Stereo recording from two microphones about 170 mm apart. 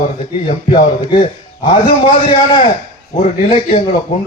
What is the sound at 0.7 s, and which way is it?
A man's voice, 30° left (ahead or behind).